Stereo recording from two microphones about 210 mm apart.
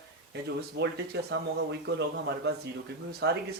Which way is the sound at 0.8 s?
55° right (ahead or behind).